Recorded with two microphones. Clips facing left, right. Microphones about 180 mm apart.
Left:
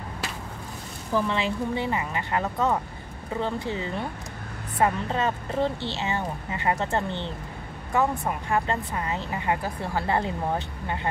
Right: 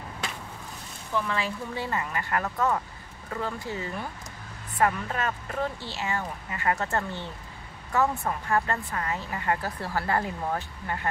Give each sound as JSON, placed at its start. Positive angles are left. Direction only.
{"t": 1.1, "sound": "speech", "side_deg": 25}